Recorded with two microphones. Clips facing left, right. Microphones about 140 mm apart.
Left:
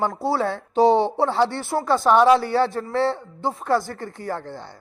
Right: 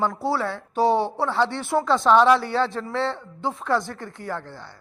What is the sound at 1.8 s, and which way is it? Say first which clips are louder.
Speech: left 3 dB; 5° left (ahead or behind).